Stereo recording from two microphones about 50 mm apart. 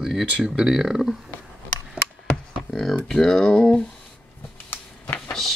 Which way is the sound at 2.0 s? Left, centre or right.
Centre.